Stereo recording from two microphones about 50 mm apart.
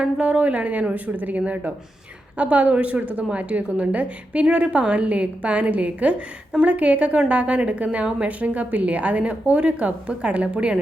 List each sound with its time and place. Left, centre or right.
0.0 s a woman's voice: right